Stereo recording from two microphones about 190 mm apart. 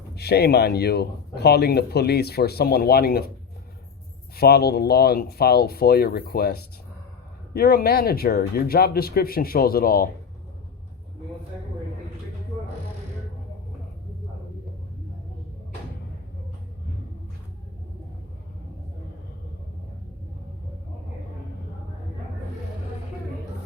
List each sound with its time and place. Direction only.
0.2 s speech: 60° left (ahead or behind)
4.4 s speech: 55° left (ahead or behind)